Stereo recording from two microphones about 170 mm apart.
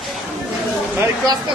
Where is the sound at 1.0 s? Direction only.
20° right (ahead or behind).